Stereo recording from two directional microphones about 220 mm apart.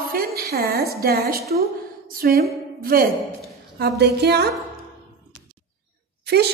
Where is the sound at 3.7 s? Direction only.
45° right (ahead or behind).